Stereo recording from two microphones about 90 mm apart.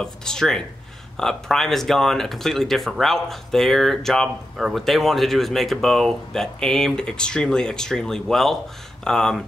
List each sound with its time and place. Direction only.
0.0 s speech: 5° left (ahead or behind)